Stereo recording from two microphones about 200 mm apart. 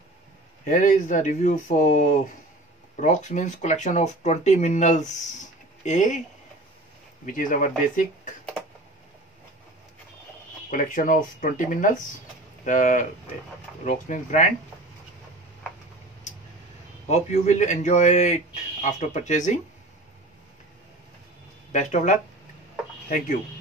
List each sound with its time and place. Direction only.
0.7 s speech: 40° left (ahead or behind)
7.2 s speech: 40° left (ahead or behind)
10.7 s speech: 40° left (ahead or behind)
17.1 s speech: 35° left (ahead or behind)
21.7 s speech: 40° left (ahead or behind)